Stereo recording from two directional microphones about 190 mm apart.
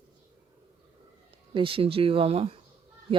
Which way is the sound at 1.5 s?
25° right (ahead or behind).